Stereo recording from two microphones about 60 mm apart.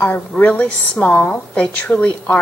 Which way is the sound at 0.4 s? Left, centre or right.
Left.